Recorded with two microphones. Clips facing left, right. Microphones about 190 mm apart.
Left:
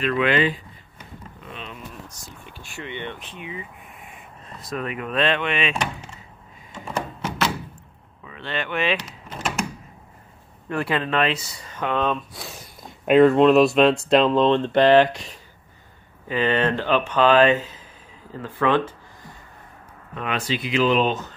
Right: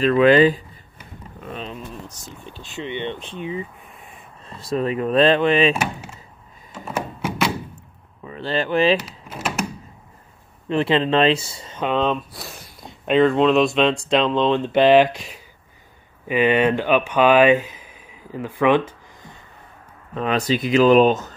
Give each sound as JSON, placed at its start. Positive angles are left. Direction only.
{"t": 0.0, "sound": "speech", "side_deg": -35}
{"t": 1.4, "sound": "a sound", "side_deg": -45}
{"t": 1.7, "sound": "a sound", "side_deg": -20}
{"t": 2.5, "sound": "speech", "side_deg": -20}
{"t": 5.8, "sound": "speech", "side_deg": -5}
{"t": 6.7, "sound": "thunk", "side_deg": -5}
{"t": 8.2, "sound": "speech", "side_deg": -35}
{"t": 9.3, "sound": "typing", "side_deg": -5}
{"t": 10.7, "sound": "speech", "side_deg": -25}
{"t": 12.3, "sound": "speech", "side_deg": -5}
{"t": 20.2, "sound": "speech", "side_deg": -35}